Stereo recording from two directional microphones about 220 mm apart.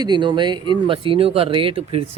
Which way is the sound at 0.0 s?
20° right (ahead or behind).